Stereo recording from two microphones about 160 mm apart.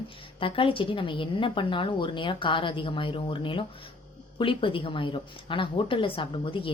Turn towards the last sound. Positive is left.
turn(degrees=35)  # may be behind; listen again after turning